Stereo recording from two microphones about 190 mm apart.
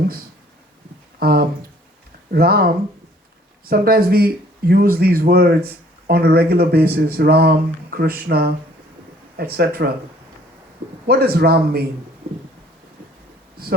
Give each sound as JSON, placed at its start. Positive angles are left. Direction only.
{"t": 1.2, "sound": "speech", "side_deg": -55}
{"t": 11.0, "sound": "speech", "side_deg": -55}